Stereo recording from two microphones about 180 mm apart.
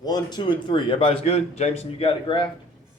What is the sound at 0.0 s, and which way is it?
A man's voice, 20° left (ahead or behind).